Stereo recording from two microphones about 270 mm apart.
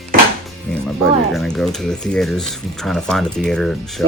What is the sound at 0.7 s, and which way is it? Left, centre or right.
Speech, centre.